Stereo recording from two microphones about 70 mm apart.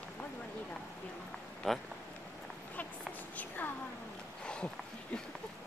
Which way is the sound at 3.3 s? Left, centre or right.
Left.